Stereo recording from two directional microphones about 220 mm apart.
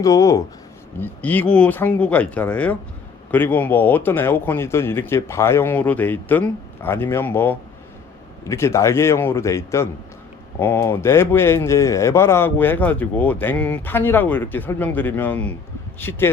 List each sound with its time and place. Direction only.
0.0 s a man's voice: 15° left (ahead or behind)